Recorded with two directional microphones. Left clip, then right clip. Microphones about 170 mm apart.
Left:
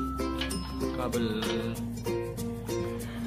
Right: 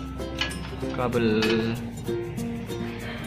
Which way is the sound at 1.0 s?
20° right (ahead or behind).